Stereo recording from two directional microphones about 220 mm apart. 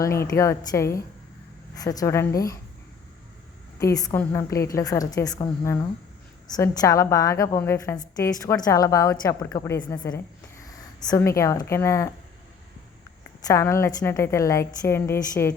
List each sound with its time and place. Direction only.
0.0 s a woman's voice: 15° left (ahead or behind)
3.8 s a woman's voice: 15° left (ahead or behind)
13.5 s a woman's voice: 15° left (ahead or behind)